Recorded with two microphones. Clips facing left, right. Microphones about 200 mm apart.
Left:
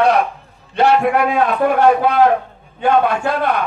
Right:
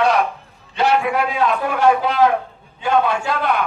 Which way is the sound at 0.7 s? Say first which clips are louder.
Left 4 dB; 55° left (ahead or behind).